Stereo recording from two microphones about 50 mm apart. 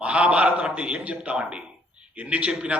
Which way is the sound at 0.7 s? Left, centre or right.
Right.